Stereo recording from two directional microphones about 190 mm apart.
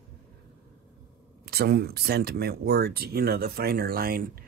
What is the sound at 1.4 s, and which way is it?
Speech, 55° right (ahead or behind).